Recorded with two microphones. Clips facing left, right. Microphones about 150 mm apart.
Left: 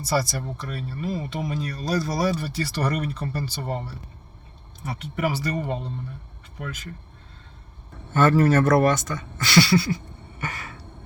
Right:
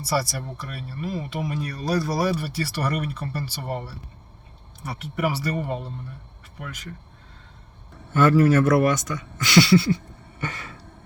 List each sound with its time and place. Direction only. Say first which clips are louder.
0.0 s speech: left 1 dB; 5° right (ahead or behind)
4.9 s speech: even; 10° right (ahead or behind)
8.4 s speech: even; 10° right (ahead or behind); by 10.0 s 25° right (ahead or behind)